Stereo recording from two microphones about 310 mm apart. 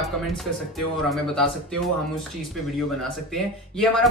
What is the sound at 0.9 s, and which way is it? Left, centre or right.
Speech, centre.